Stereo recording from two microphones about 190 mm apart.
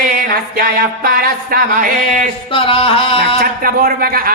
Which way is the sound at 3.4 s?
50° right (ahead or behind).